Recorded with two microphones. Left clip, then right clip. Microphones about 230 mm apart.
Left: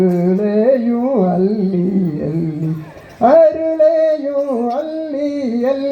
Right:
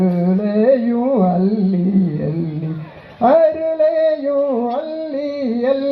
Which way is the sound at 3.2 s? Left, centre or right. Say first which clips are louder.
Left 3 dB; left.